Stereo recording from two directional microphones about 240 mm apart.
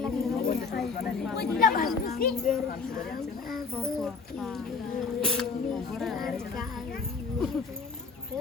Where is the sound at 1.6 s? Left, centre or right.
Left.